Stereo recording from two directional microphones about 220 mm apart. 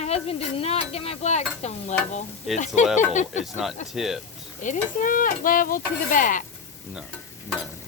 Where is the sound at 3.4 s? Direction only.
Centre (ahead or behind).